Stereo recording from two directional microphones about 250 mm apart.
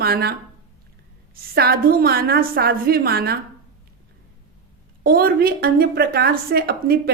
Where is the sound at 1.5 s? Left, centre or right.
Right.